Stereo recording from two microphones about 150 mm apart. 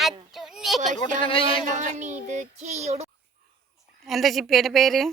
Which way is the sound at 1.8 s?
55° right (ahead or behind).